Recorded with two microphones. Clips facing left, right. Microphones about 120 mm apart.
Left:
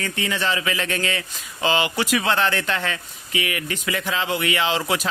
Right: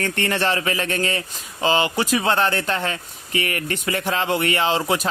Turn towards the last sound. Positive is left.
turn(degrees=-35)  # may be behind; listen again after turning